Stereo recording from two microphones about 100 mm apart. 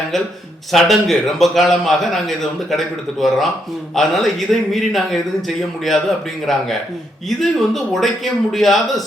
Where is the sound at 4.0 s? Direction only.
Centre (ahead or behind).